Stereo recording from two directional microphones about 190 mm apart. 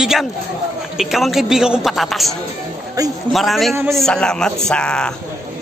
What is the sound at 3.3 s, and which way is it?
A woman's voice, centre (ahead or behind).